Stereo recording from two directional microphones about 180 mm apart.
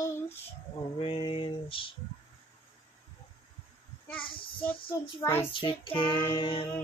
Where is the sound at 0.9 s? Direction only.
30° left (ahead or behind).